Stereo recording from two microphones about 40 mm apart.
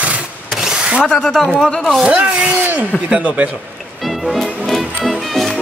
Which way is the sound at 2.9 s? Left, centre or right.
Centre.